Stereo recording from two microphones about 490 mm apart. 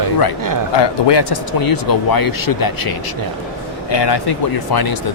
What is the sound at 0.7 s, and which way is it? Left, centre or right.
Speech, left.